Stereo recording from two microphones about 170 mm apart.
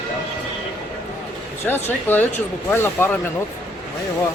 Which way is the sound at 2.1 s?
10° left (ahead or behind).